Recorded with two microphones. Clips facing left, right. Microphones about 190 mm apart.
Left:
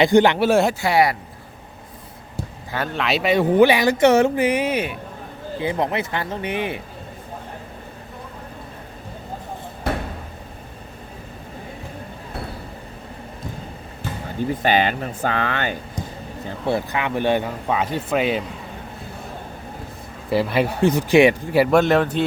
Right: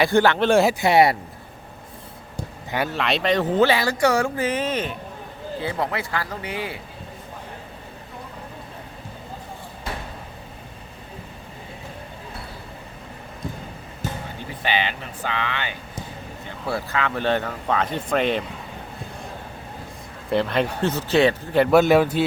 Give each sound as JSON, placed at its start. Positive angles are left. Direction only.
{"t": 0.0, "sound": "speech", "side_deg": 20}
{"t": 0.4, "sound": "speech", "side_deg": 0}
{"t": 0.7, "sound": "speech", "side_deg": -20}
{"t": 2.9, "sound": "speech", "side_deg": 0}
{"t": 14.6, "sound": "speech", "side_deg": 45}
{"t": 16.6, "sound": "speech", "side_deg": 20}
{"t": 20.3, "sound": "speech", "side_deg": 5}
{"t": 21.7, "sound": "a man's voice", "side_deg": -5}